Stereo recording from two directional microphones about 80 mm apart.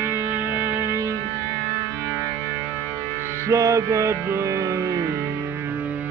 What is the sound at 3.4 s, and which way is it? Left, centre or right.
Music, right.